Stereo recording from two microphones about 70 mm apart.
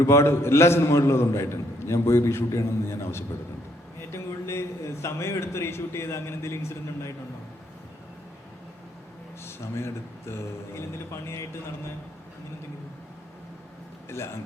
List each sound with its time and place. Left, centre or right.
0.0 s a man's voice: left
4.1 s a sound: left
5.0 s a man's voice: left
9.4 s a man's voice: left